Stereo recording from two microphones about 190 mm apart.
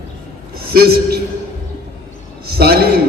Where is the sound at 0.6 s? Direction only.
55° right (ahead or behind).